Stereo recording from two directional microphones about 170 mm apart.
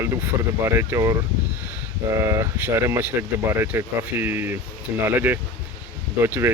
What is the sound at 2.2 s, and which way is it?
Speech, 15° right (ahead or behind).